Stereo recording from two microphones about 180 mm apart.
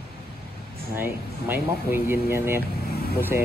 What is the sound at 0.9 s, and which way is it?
Speech, 10° right (ahead or behind).